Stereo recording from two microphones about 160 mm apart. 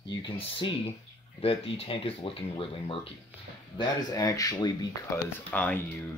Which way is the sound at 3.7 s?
25° left (ahead or behind).